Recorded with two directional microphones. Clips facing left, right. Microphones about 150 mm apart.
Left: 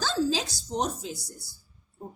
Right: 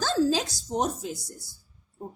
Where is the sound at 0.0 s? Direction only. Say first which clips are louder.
Right 3 dB; 50° right (ahead or behind).